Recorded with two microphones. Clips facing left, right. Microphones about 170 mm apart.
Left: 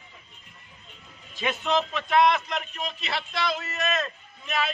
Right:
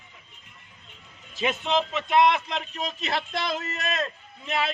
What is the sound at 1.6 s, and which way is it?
A man's voice, 20° right (ahead or behind).